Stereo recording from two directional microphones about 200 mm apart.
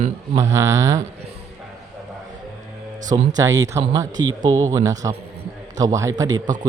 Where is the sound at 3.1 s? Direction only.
15° right (ahead or behind).